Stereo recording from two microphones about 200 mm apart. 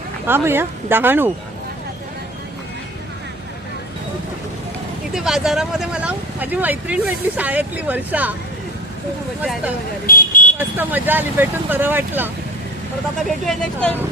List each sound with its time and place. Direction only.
0.3 s speech: 10° right (ahead or behind)
5.1 s speech: centre (ahead or behind)
9.4 s speech: 5° right (ahead or behind)
10.1 s vehicle: 45° left (ahead or behind)
10.6 s speech: 10° right (ahead or behind)
13.2 s speech: centre (ahead or behind)